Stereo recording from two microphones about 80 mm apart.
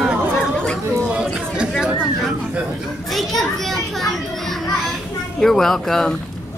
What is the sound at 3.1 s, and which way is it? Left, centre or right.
Speech, centre.